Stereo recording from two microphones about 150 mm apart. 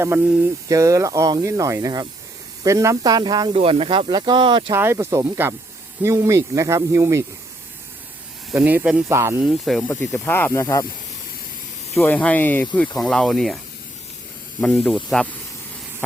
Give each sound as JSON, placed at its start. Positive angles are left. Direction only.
{"t": 0.0, "sound": "speech", "side_deg": -15}
{"t": 0.7, "sound": "speech", "side_deg": -20}
{"t": 4.7, "sound": "speech", "side_deg": -15}
{"t": 8.5, "sound": "speech", "side_deg": -10}
{"t": 9.5, "sound": "speech", "side_deg": 0}
{"t": 9.8, "sound": "speech", "side_deg": 15}
{"t": 11.9, "sound": "speech", "side_deg": 10}
{"t": 14.6, "sound": "speech", "side_deg": 0}